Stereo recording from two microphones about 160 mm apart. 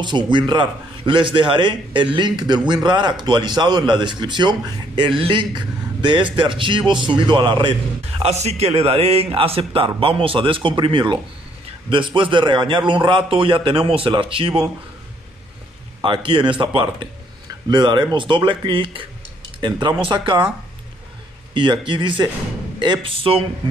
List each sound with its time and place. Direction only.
0.0 s a man's voice: 30° right (ahead or behind)
8.2 s a man's voice: 40° right (ahead or behind)
16.0 s a man's voice: 30° right (ahead or behind)
21.5 s a man's voice: 30° right (ahead or behind)